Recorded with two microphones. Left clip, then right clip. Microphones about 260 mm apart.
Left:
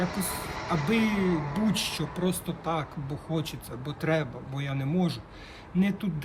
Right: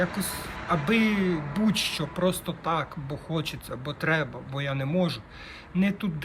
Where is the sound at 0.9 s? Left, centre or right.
Centre.